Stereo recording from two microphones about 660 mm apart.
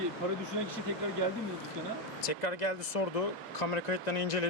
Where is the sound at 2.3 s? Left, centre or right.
Left.